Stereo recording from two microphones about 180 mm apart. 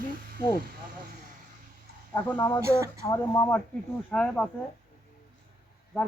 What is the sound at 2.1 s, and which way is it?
Speech, 10° left (ahead or behind).